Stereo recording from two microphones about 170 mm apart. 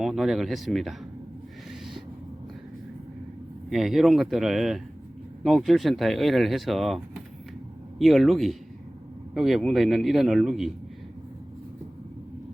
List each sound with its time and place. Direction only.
0.0 s speech: centre (ahead or behind)
3.7 s speech: centre (ahead or behind)